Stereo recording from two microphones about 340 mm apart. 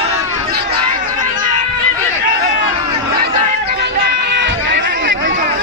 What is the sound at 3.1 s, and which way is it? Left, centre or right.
Chatter, right.